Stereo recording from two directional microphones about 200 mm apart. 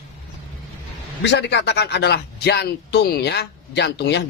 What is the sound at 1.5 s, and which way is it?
Speech, 60° left (ahead or behind).